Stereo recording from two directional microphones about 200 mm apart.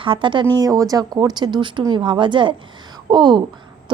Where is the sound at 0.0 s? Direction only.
25° right (ahead or behind).